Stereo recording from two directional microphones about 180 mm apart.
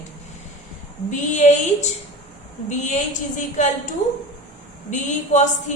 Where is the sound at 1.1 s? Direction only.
40° left (ahead or behind).